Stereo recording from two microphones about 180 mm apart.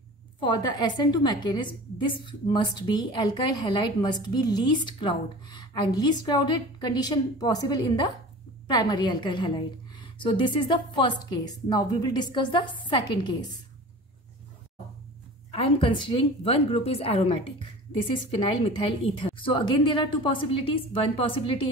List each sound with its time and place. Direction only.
0.4 s a woman's voice: 25° left (ahead or behind)
15.5 s a woman's voice: 30° left (ahead or behind)
18.9 s a woman's voice: 30° left (ahead or behind)